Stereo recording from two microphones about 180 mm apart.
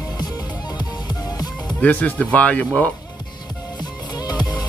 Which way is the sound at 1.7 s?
5° left (ahead or behind).